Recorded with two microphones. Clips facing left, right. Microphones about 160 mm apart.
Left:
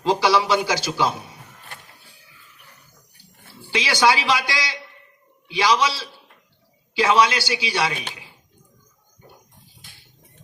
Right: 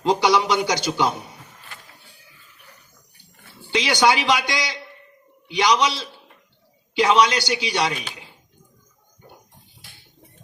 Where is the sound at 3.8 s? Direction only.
20° right (ahead or behind).